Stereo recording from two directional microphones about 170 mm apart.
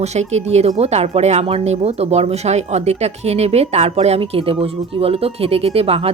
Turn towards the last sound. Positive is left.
turn(degrees=-35)  # may be behind; listen again after turning